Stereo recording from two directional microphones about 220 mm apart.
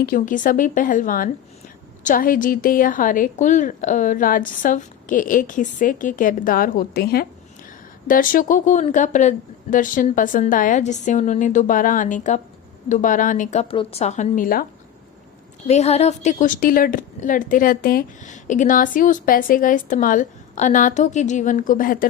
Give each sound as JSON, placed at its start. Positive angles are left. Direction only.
{"t": 0.0, "sound": "a woman's voice", "side_deg": 40}
{"t": 15.6, "sound": "a woman's voice", "side_deg": 30}